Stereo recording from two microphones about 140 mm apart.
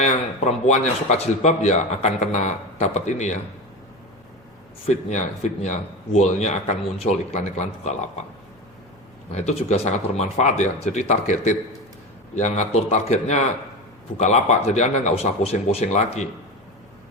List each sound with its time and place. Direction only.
0.0 s speech: 55° left (ahead or behind)
4.9 s speech: 55° left (ahead or behind)
9.3 s speech: 55° left (ahead or behind)